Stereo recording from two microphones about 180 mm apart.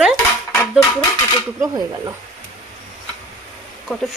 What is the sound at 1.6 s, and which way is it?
Speech, 20° right (ahead or behind).